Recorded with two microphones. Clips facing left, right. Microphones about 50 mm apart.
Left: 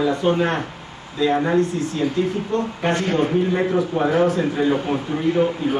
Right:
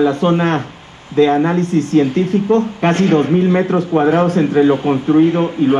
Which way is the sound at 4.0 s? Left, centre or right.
Right.